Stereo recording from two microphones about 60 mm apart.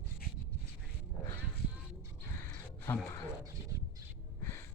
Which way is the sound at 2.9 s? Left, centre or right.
Left.